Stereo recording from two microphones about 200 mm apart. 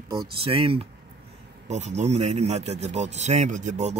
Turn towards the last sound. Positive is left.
turn(degrees=-35)  # may be behind; listen again after turning